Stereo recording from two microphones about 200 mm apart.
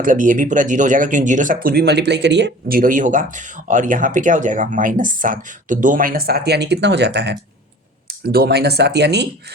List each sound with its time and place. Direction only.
0.0 s speech: 40° right (ahead or behind); by 9.2 s 55° right (ahead or behind)